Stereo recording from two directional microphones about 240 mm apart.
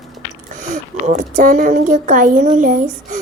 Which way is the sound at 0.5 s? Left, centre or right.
Right.